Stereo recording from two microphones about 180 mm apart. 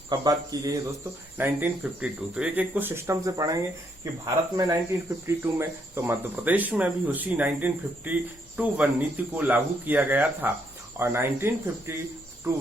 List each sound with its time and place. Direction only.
0.1 s speech: 20° right (ahead or behind)